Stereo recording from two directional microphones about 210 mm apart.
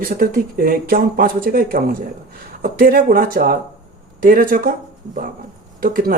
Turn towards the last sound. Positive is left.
turn(degrees=-45)  # may be behind; listen again after turning